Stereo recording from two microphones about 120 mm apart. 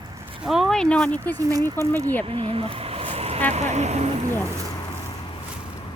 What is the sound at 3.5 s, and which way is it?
Speech, 70° right (ahead or behind).